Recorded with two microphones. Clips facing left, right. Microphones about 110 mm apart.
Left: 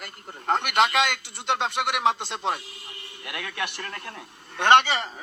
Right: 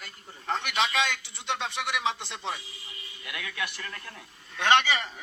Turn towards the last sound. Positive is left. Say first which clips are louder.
# left 2 dB
turn(degrees=35)  # may be behind; listen again after turning